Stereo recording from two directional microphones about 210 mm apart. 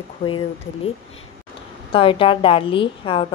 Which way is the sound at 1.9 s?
25° left (ahead or behind).